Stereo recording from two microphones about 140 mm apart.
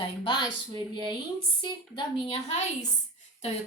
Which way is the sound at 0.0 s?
35° left (ahead or behind).